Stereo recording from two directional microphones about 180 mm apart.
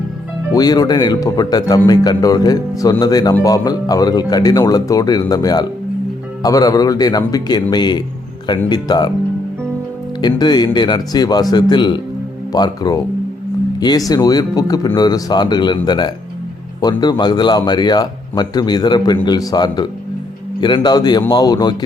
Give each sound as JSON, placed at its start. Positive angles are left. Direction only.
{"t": 0.5, "sound": "speech", "side_deg": 20}
{"t": 10.2, "sound": "speech", "side_deg": 25}